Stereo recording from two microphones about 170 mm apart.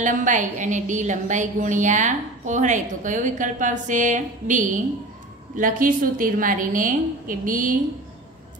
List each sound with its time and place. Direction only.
0.0 s a woman's voice: 50° right (ahead or behind)